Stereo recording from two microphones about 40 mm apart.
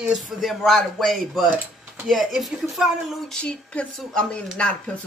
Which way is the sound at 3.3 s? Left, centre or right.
Left.